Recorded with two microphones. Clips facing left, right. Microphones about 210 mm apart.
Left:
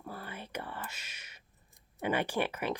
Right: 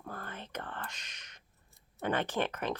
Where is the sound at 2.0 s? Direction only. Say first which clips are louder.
Left 1 dB; 10° left (ahead or behind).